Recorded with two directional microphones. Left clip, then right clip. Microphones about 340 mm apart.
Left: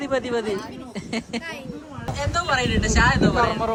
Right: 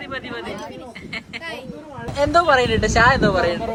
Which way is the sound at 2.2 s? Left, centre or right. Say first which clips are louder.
Right 8 dB; centre.